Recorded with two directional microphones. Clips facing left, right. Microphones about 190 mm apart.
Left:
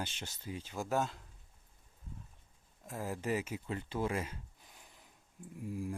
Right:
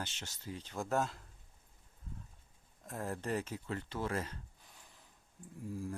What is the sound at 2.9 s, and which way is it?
Speech, 5° left (ahead or behind).